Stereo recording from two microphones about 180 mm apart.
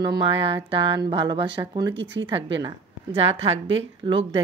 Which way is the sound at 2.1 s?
90° right.